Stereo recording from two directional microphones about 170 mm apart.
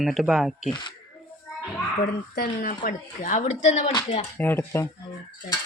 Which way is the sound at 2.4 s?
55° left (ahead or behind).